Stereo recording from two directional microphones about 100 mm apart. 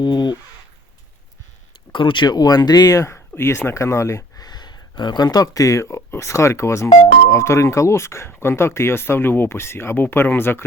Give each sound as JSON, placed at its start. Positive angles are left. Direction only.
{"t": 0.0, "sound": "speech", "side_deg": 45}
{"t": 1.9, "sound": "speech", "side_deg": 55}
{"t": 4.4, "sound": "speech", "side_deg": 45}